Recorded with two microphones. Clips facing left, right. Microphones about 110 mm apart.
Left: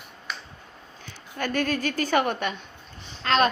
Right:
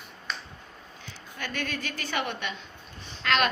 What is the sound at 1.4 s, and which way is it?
A woman's voice, 45° left (ahead or behind).